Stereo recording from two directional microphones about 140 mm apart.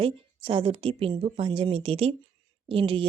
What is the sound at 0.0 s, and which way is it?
A woman's voice, 40° right (ahead or behind).